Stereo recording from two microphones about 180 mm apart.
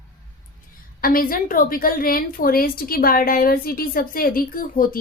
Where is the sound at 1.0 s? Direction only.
55° left (ahead or behind).